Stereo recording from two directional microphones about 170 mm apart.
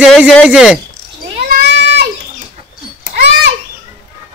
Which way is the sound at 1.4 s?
75° right (ahead or behind).